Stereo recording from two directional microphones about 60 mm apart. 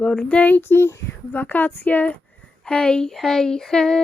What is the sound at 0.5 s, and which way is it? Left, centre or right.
Speech, left.